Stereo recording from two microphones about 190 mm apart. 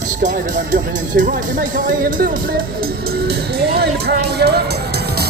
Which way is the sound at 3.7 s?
55° right (ahead or behind).